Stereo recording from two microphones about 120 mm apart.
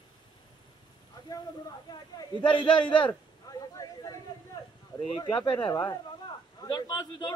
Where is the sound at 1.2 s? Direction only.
30° left (ahead or behind).